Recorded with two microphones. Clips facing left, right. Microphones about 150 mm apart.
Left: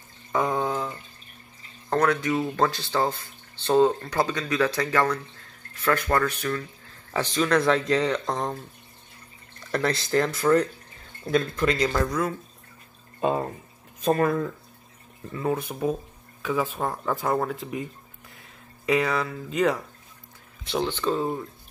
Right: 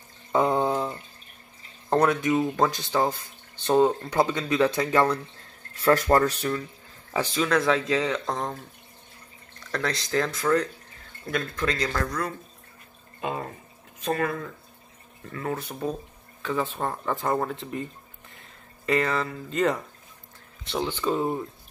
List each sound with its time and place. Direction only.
0.3 s a sound: 30° right (ahead or behind)
1.9 s speech: 20° right (ahead or behind)
7.2 s speech: 5° right (ahead or behind)
9.7 s speech: 10° left (ahead or behind)
14.0 s speech: 40° left (ahead or behind)
15.3 s speech: 15° left (ahead or behind)
18.9 s speech: 5° left (ahead or behind)
20.9 s speech: 10° right (ahead or behind)